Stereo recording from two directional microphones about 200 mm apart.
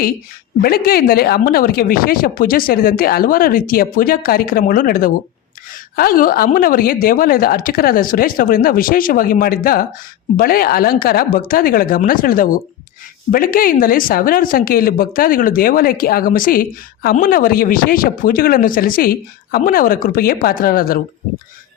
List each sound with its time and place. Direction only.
0.6 s speech: 50° left (ahead or behind)